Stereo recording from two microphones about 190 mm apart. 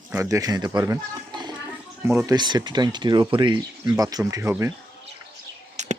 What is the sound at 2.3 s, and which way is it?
Speech, 20° right (ahead or behind).